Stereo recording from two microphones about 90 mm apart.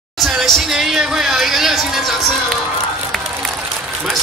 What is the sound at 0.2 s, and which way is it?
Speech, centre (ahead or behind).